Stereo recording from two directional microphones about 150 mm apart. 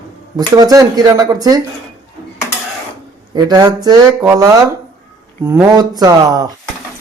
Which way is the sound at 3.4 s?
25° right (ahead or behind).